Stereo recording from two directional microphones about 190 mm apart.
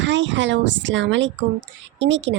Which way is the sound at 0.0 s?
70° right (ahead or behind).